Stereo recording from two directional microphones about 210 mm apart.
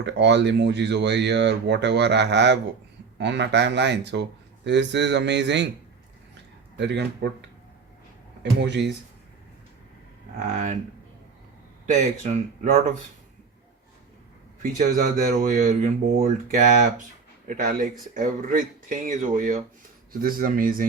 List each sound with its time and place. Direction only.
0.0 s speech: 55° right (ahead or behind)
6.7 s speech: 55° right (ahead or behind)
10.5 s speech: 35° right (ahead or behind)
11.9 s speech: 35° right (ahead or behind)
14.6 s speech: 40° right (ahead or behind)